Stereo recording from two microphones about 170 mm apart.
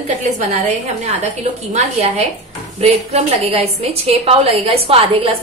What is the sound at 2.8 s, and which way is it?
A woman's voice, 35° right (ahead or behind).